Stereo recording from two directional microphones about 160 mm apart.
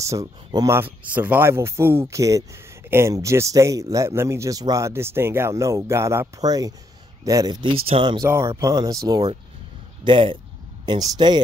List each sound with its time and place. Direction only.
0.0 s speech: 20° right (ahead or behind)
8.3 s speech: 15° right (ahead or behind)